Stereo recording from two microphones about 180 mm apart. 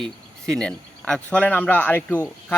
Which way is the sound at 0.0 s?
5° left (ahead or behind).